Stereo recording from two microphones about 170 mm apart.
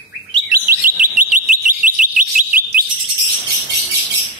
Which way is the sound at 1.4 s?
50° right (ahead or behind).